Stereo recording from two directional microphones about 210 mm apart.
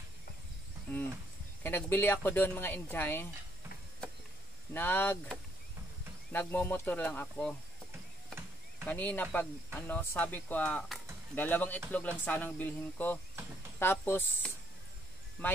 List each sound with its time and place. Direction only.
0.9 s a sound: 10° left (ahead or behind)
1.6 s speech: 10° left (ahead or behind)
4.7 s speech: 10° left (ahead or behind)
8.8 s speech: 10° left (ahead or behind)